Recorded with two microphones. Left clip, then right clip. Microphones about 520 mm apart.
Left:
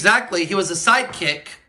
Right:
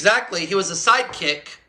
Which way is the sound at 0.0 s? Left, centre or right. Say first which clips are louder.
Left 2 dB; centre.